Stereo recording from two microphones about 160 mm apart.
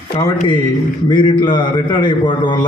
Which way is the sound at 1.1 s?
30° left (ahead or behind).